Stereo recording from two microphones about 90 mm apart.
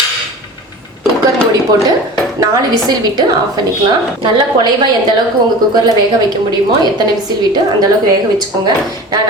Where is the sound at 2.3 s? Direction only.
45° right (ahead or behind).